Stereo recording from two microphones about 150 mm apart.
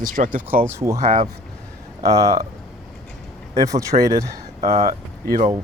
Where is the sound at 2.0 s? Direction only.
20° right (ahead or behind).